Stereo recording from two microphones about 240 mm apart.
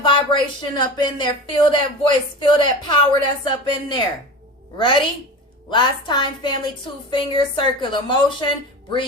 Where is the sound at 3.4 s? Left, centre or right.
Left.